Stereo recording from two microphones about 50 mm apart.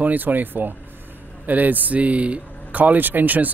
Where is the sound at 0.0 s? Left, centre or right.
Right.